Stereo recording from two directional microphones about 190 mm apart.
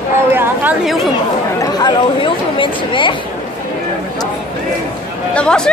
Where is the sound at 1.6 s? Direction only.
20° left (ahead or behind).